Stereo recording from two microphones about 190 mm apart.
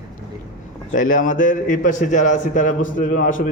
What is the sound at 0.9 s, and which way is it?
A man's voice, 45° left (ahead or behind).